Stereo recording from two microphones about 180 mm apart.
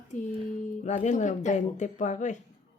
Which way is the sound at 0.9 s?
40° left (ahead or behind).